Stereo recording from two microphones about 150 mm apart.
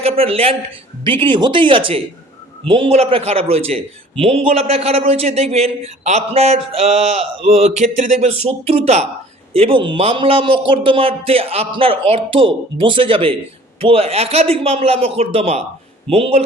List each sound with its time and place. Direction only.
0.0 s a man's voice: 40° right (ahead or behind)